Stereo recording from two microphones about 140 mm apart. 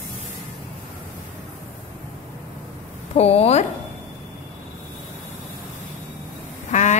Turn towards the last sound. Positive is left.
turn(degrees=55)  # may be behind; listen again after turning